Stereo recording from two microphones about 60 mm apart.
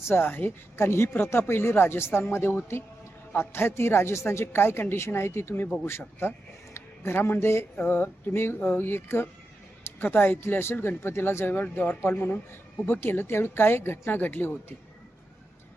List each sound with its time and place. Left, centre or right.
0.0 s speech: left